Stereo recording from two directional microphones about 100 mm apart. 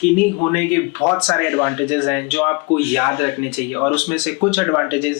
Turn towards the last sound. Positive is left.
turn(degrees=15)  # may be behind; listen again after turning